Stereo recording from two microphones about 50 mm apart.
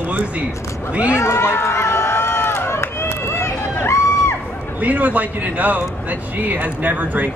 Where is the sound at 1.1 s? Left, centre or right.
Left.